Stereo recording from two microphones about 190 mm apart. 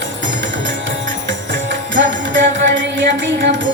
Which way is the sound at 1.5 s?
70° right (ahead or behind).